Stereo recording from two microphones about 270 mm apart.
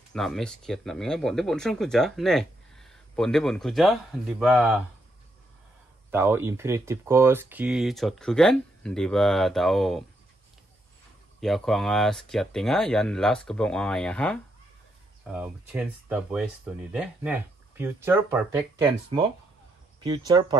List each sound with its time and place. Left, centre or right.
0.1 s speech: centre
6.1 s speech: centre
11.4 s speech: centre
19.0 s speech: centre